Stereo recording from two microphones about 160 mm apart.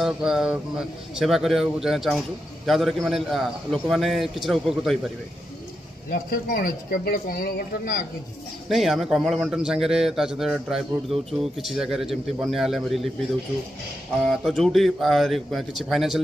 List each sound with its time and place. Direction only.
0.0 s a man's voice: 5° right (ahead or behind)
6.0 s speech: 65° left (ahead or behind)
8.6 s a man's voice: centre (ahead or behind)
14.2 s a man's voice: centre (ahead or behind)